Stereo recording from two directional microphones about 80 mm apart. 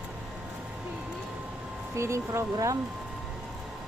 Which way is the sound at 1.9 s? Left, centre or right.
Right.